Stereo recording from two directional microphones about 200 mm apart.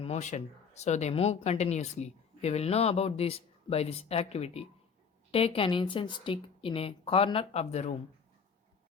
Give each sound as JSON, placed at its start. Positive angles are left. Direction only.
{"t": 0.0, "sound": "a woman's voice", "side_deg": 35}